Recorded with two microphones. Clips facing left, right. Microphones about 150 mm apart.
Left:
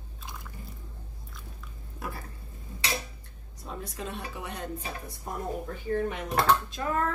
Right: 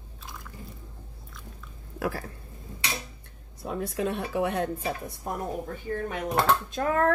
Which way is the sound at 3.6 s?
60° right (ahead or behind).